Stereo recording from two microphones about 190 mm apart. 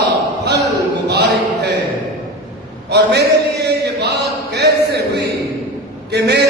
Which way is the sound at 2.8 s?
60° right (ahead or behind).